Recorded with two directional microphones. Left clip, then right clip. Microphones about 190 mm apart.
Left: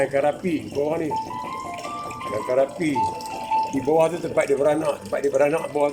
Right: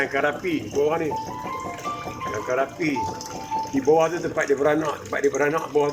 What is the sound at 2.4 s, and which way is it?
Speech, 20° left (ahead or behind).